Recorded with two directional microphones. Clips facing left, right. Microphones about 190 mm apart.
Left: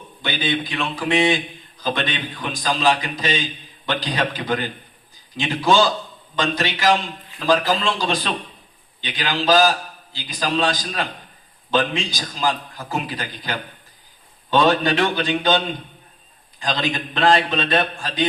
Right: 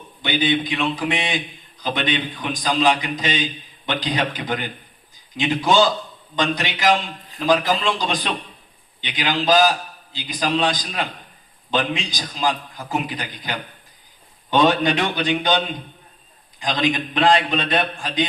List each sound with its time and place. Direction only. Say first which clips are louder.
0.2 s a man's voice: right 3 dB; 20° right (ahead or behind)